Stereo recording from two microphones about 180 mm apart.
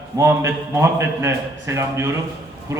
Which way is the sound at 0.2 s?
15° right (ahead or behind).